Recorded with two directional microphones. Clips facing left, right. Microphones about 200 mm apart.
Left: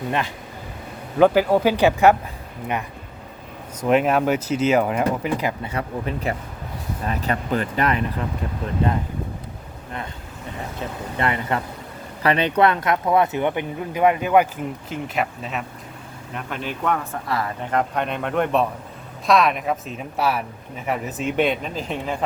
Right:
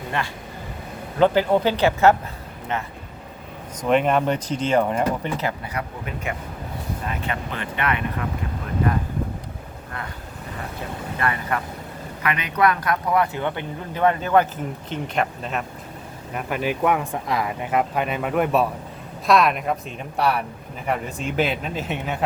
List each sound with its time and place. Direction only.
1.2 s speech: 10° left (ahead or behind)
3.8 s speech: 5° left (ahead or behind)
5.5 s speech: 25° left (ahead or behind)
11.2 s speech: 20° left (ahead or behind); by 21.9 s 5° right (ahead or behind)